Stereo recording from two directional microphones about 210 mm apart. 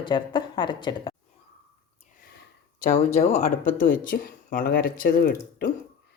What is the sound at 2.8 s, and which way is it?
Speech, 35° left (ahead or behind).